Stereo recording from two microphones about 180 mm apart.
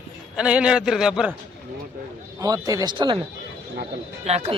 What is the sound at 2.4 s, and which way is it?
Speech, 20° right (ahead or behind).